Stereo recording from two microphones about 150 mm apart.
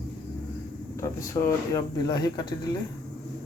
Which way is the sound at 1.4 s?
30° left (ahead or behind).